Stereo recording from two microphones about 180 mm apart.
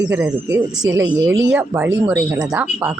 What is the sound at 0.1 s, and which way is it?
Speech, 10° right (ahead or behind).